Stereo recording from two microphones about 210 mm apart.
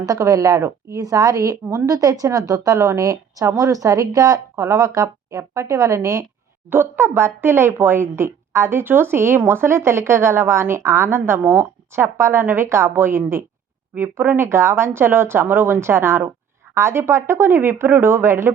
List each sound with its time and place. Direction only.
0.0 s speech: 15° right (ahead or behind)